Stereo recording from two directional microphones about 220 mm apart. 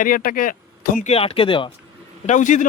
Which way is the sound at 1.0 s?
25° left (ahead or behind).